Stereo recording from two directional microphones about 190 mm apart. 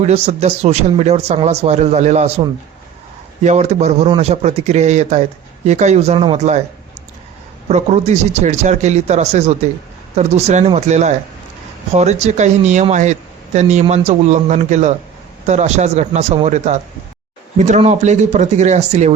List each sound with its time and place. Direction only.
0.0 s speech: 35° right (ahead or behind)
7.7 s speech: 35° right (ahead or behind)